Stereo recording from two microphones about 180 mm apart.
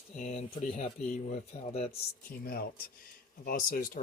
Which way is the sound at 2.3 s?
55° left (ahead or behind).